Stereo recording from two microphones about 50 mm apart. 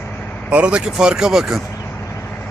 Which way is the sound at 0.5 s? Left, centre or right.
Right.